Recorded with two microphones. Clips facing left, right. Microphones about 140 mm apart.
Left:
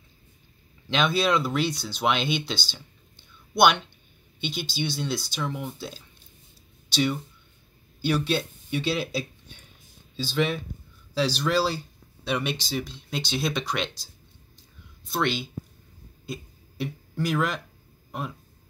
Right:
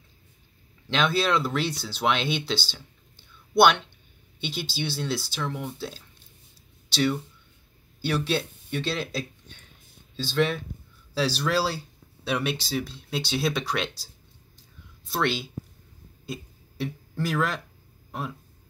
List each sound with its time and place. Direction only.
0.8 s speech: centre (ahead or behind)
15.0 s speech: 5° right (ahead or behind)
16.3 s a sound: centre (ahead or behind)